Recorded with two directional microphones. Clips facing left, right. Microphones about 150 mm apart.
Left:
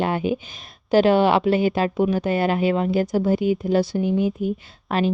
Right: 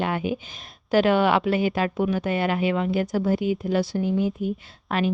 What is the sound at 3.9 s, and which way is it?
Speech, 20° left (ahead or behind).